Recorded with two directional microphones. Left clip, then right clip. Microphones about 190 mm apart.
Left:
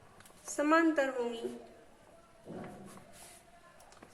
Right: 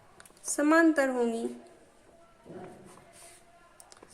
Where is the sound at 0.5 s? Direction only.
40° right (ahead or behind).